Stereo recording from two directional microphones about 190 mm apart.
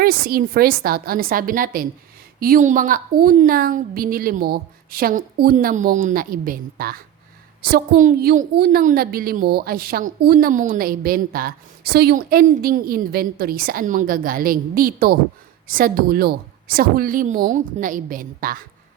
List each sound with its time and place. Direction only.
0.0 s a woman's voice: 50° right (ahead or behind)